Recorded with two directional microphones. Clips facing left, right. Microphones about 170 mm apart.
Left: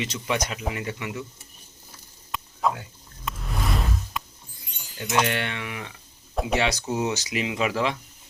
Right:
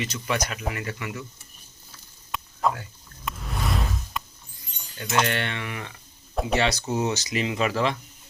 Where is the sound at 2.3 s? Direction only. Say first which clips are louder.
Even; centre (ahead or behind).